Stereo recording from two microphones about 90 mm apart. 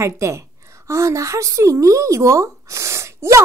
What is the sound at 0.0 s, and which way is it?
A woman's voice, 35° right (ahead or behind).